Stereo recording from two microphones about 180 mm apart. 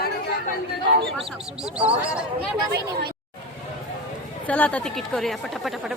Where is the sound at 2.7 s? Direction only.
60° right (ahead or behind).